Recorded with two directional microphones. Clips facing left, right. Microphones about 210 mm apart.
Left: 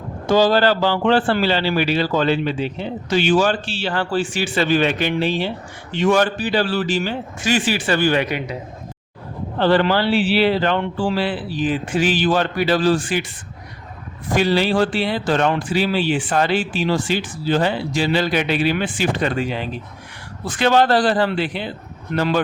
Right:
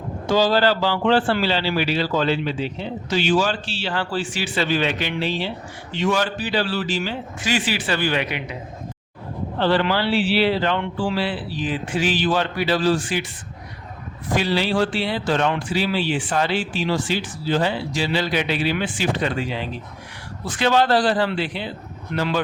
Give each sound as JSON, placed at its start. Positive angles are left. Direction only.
{"t": 0.3, "sound": "speech", "side_deg": 55}
{"t": 9.6, "sound": "speech", "side_deg": 45}
{"t": 14.3, "sound": "speech", "side_deg": 50}